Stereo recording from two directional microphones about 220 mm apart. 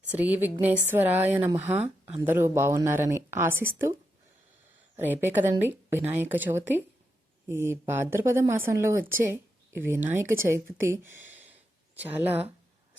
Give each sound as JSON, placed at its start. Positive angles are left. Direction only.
{"t": 0.1, "sound": "speech", "side_deg": -5}
{"t": 4.9, "sound": "speech", "side_deg": -10}